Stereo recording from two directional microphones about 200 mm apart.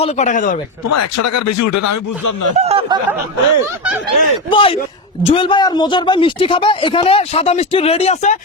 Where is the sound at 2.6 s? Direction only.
30° right (ahead or behind).